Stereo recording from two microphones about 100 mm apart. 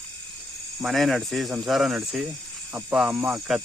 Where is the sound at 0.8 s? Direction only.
Centre (ahead or behind).